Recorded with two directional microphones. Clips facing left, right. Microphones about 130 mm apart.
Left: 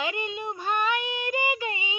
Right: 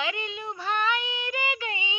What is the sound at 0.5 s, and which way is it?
Female singing, 45° left (ahead or behind).